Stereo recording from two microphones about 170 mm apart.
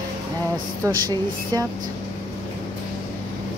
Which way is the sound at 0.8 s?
20° right (ahead or behind).